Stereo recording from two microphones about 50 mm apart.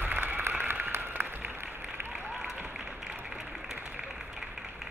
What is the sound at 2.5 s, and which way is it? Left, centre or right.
Applause, right.